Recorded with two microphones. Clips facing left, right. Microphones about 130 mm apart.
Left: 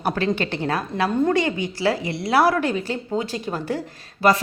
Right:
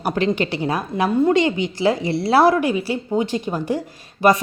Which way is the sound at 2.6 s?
10° right (ahead or behind).